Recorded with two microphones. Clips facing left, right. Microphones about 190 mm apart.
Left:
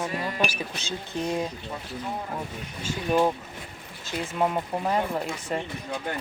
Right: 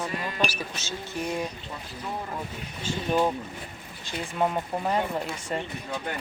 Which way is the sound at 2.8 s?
5° left (ahead or behind).